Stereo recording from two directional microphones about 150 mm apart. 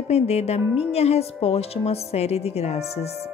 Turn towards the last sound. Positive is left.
turn(degrees=45)  # may be behind; listen again after turning